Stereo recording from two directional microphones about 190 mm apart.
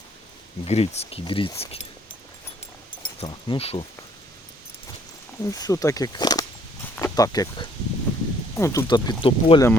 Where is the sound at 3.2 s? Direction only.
30° left (ahead or behind).